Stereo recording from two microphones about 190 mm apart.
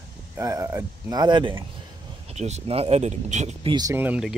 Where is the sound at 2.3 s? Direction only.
35° right (ahead or behind).